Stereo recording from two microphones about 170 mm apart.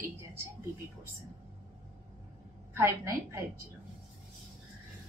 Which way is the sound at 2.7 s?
15° right (ahead or behind).